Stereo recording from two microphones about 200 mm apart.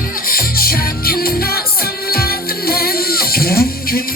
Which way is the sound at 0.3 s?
45° left (ahead or behind).